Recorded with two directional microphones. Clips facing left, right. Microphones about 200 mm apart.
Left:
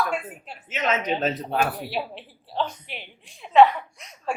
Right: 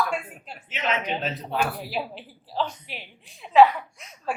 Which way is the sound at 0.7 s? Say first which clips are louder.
Left 3 dB; 45° left (ahead or behind).